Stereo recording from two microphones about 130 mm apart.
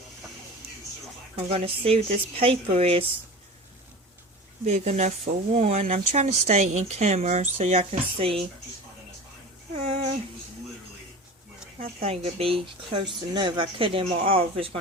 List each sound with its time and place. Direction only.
1.4 s speech: 50° right (ahead or behind)
4.6 s speech: 60° right (ahead or behind)
6.1 s speech: 55° right (ahead or behind)
9.7 s speech: 55° right (ahead or behind)
11.8 s speech: 55° right (ahead or behind)